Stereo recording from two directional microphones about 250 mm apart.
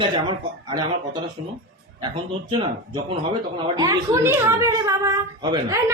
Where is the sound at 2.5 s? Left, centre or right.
Centre.